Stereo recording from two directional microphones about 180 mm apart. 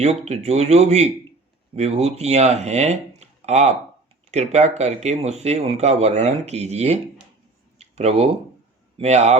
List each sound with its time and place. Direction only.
0.0 s speech: 35° right (ahead or behind)
7.8 s a sound: 35° right (ahead or behind)
9.0 s speech: 40° right (ahead or behind)